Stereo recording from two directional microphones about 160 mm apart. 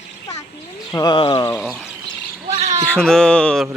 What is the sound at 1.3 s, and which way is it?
Speech, 15° left (ahead or behind).